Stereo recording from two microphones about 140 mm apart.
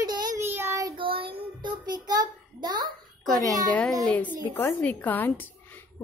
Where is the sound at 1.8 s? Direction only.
30° right (ahead or behind).